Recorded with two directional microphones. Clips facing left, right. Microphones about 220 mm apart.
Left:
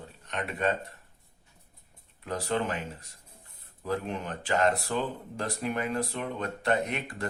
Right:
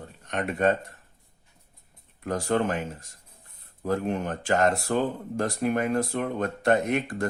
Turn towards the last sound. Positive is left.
turn(degrees=-45)  # may be behind; listen again after turning